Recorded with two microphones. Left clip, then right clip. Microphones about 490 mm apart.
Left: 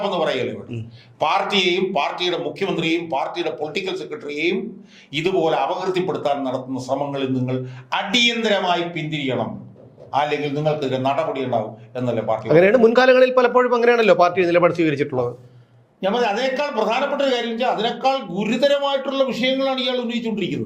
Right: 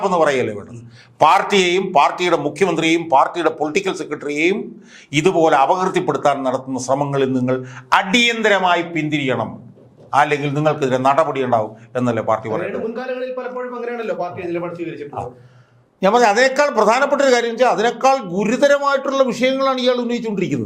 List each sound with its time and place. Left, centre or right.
0.0 s a man's voice: right
12.9 s a man's voice: left
16.0 s a man's voice: right